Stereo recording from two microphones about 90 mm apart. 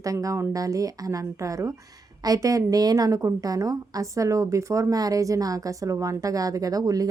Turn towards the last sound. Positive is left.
turn(degrees=-40)  # may be behind; listen again after turning